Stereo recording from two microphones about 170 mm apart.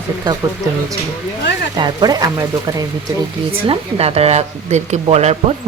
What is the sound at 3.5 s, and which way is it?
Speech, 35° right (ahead or behind).